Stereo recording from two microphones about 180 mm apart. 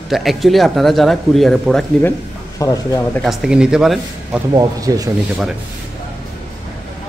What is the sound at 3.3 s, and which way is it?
Speech, 5° right (ahead or behind).